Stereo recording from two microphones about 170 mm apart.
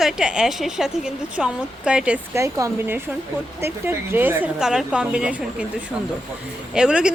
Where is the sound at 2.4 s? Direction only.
20° right (ahead or behind).